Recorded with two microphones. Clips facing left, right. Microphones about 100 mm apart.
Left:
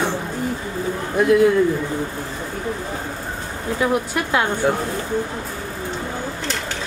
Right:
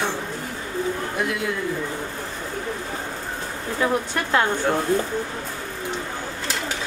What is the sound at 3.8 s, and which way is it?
A woman's voice, 10° left (ahead or behind).